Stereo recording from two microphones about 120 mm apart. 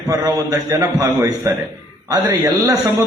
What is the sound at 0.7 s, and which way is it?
Speech, 20° right (ahead or behind).